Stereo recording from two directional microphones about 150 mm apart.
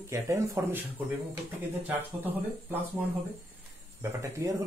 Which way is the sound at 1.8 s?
15° right (ahead or behind).